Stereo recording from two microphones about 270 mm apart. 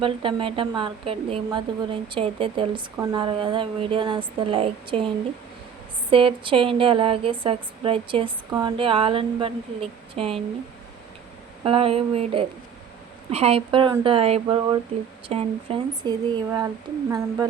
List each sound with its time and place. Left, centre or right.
0.0 s a woman's voice: centre
11.6 s a woman's voice: right